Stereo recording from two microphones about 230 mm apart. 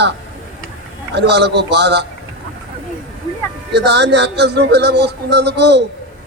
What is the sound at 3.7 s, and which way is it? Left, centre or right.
Speech, right.